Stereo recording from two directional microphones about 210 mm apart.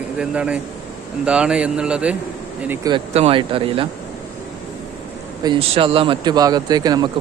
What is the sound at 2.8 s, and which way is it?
Speech, 25° right (ahead or behind).